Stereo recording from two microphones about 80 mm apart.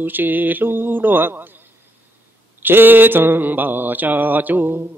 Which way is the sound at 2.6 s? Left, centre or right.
Right.